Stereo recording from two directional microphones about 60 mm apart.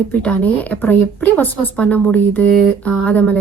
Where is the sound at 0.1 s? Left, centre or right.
Left.